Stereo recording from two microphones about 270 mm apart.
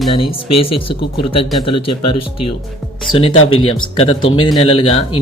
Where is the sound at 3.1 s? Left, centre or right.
Left.